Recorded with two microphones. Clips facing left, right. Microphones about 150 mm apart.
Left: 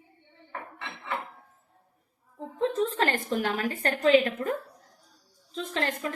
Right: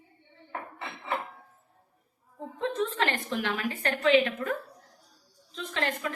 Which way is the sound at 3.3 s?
45° left (ahead or behind).